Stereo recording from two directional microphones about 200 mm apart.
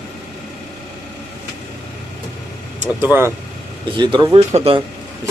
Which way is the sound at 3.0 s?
10° right (ahead or behind).